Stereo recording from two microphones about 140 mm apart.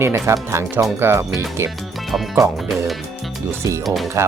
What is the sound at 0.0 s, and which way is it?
Speech, 20° right (ahead or behind).